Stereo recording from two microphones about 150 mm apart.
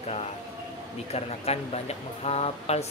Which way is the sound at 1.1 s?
45° left (ahead or behind).